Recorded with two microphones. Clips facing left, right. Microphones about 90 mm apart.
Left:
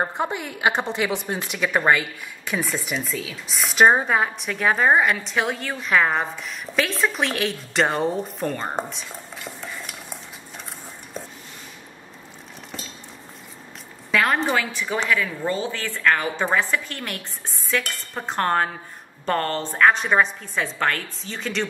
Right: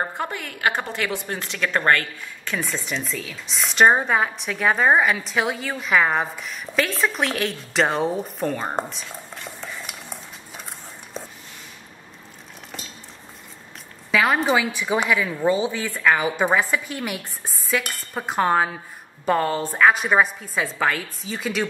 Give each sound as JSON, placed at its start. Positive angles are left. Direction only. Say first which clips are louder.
{"t": 0.0, "sound": "a woman's voice", "louder": "left 2 dB", "side_deg": 15}
{"t": 14.1, "sound": "a woman's voice", "louder": "right 2 dB", "side_deg": -5}